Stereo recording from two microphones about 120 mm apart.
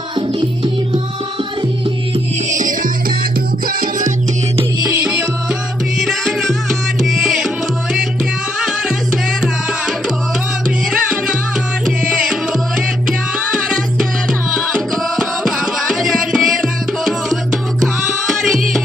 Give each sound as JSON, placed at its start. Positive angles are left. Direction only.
{"t": 0.2, "sound": "music", "side_deg": -45}
{"t": 2.5, "sound": "music", "side_deg": -90}
{"t": 5.0, "sound": "music", "side_deg": -10}
{"t": 8.5, "sound": "music", "side_deg": -5}
{"t": 10.9, "sound": "music", "side_deg": -10}